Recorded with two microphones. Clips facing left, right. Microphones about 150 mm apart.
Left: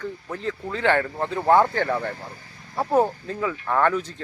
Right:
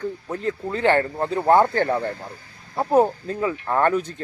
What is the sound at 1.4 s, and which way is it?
Speech, 20° right (ahead or behind).